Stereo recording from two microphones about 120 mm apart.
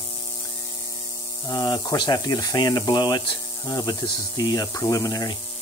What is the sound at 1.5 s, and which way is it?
Speech, 35° left (ahead or behind).